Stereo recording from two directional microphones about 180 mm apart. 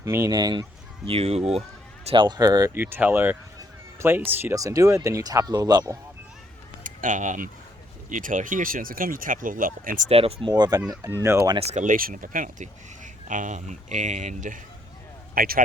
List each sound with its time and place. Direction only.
0.0 s speech: 15° right (ahead or behind)
1.0 s speech: 35° right (ahead or behind)
6.8 s speech: 45° right (ahead or behind)
10.1 s speech: 35° right (ahead or behind)
10.6 s speech: 20° right (ahead or behind)
11.5 s speech: 35° right (ahead or behind); by 15.6 s 55° right (ahead or behind)